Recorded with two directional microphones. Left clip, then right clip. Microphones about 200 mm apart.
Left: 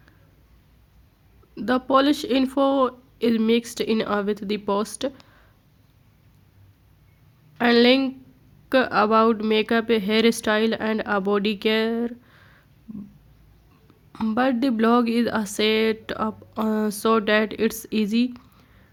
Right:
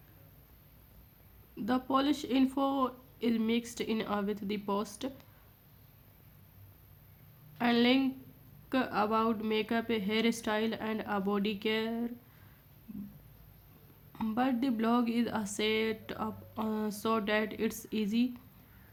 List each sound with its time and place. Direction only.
1.5 s speech: 35° left (ahead or behind)
7.6 s speech: 30° left (ahead or behind)
14.1 s speech: 25° left (ahead or behind)